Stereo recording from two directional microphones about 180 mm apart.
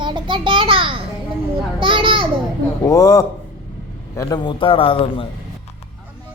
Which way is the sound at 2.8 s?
20° left (ahead or behind).